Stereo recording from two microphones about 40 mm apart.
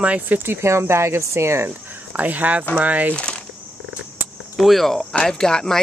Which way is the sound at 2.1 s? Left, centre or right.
Right.